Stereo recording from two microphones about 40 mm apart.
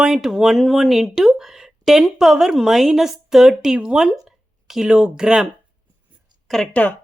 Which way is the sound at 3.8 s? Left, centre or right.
Right.